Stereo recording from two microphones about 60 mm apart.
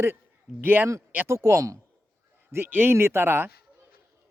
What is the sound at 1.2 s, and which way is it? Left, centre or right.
A man's voice, right.